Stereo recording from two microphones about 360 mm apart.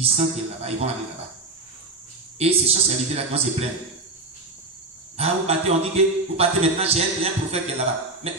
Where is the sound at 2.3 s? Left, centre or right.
Centre.